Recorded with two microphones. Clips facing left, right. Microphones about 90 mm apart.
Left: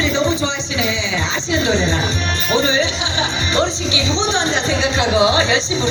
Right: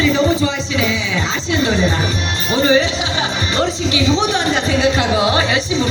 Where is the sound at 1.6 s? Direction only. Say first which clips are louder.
Right 2 dB; 20° left (ahead or behind).